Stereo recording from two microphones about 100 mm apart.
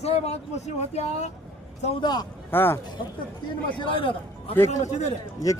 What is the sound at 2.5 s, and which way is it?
Speech, 20° left (ahead or behind).